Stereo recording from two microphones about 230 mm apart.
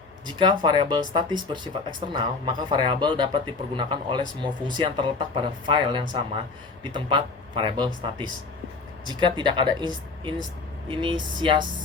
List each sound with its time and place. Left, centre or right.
0.3 s speech: centre
9.0 s speech: right